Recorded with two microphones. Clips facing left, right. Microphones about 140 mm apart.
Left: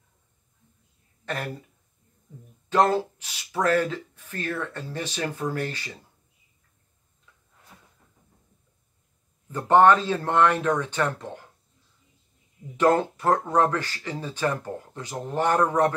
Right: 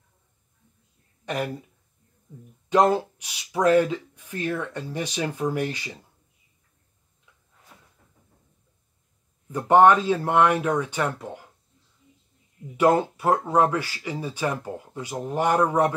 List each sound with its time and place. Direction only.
1.2 s speech: 15° right (ahead or behind)
2.7 s speech: 15° right (ahead or behind)
9.5 s speech: 15° right (ahead or behind)
12.7 s speech: 10° right (ahead or behind)